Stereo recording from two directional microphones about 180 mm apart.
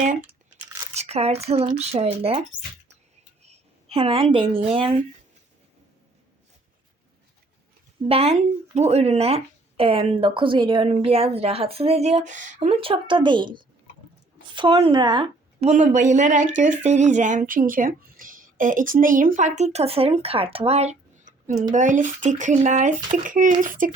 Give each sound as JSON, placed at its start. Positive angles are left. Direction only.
{"t": 0.9, "sound": "a sound", "side_deg": -35}
{"t": 1.5, "sound": "speech", "side_deg": -35}
{"t": 3.4, "sound": "a woman's voice", "side_deg": -35}
{"t": 8.0, "sound": "a woman's voice", "side_deg": -35}
{"t": 15.7, "sound": "speech", "side_deg": -45}